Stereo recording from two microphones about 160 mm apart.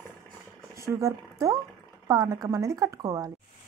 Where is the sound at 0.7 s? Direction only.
20° right (ahead or behind).